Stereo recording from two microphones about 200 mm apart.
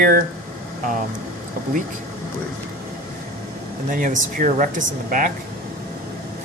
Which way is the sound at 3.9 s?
40° right (ahead or behind).